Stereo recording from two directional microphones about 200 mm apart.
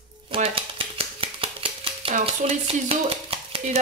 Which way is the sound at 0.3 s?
25° right (ahead or behind).